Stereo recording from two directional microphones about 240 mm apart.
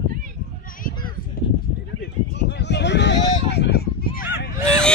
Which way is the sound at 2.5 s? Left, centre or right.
Left.